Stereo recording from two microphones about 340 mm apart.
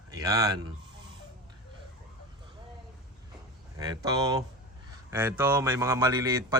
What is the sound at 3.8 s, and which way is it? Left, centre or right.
Speech, centre.